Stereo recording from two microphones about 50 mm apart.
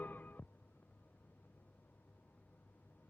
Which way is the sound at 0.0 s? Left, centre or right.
Left.